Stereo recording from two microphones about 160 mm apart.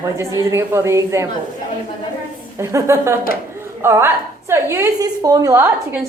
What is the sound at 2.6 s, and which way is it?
A woman's voice, 20° right (ahead or behind).